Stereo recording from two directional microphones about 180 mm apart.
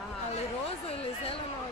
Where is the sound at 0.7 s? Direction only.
35° left (ahead or behind).